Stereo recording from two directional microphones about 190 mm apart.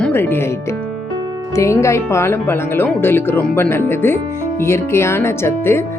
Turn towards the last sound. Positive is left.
turn(degrees=10)  # may be behind; listen again after turning